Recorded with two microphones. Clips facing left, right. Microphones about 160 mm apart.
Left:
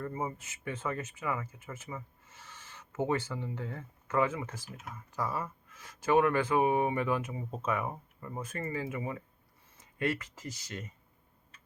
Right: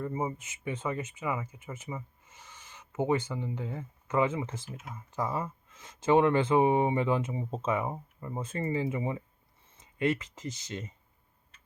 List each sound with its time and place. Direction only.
0.0 s speech: 20° right (ahead or behind)